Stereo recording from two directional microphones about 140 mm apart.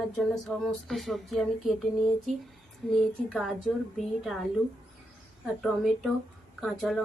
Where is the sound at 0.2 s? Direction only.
Centre (ahead or behind).